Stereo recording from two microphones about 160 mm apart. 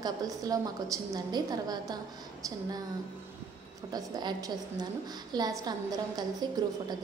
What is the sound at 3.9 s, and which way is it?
A woman's voice, 25° right (ahead or behind).